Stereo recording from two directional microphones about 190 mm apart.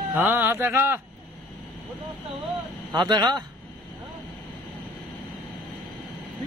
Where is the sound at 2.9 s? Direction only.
20° right (ahead or behind).